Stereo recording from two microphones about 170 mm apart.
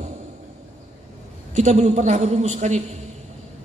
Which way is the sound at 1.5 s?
45° right (ahead or behind).